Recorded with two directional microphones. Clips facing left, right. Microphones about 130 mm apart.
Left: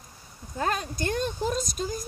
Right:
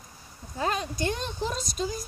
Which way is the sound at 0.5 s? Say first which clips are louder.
Even; 45° left (ahead or behind).